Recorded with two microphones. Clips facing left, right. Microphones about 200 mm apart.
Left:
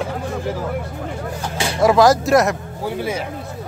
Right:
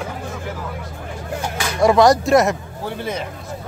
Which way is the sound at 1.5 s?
30° left (ahead or behind).